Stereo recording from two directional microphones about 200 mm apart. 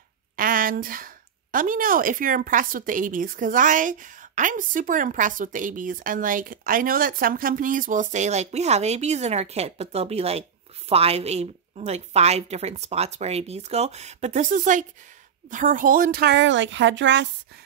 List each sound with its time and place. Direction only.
0.4 s a woman's voice: 45° right (ahead or behind); by 17.3 s 65° right (ahead or behind)